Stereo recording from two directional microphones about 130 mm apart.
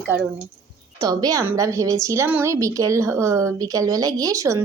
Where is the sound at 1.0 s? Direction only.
30° right (ahead or behind).